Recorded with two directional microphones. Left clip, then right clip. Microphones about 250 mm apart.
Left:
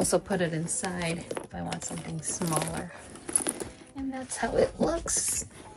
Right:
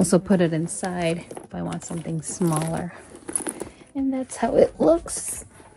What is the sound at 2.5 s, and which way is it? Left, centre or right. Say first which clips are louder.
Speech: right 2 dB; centre.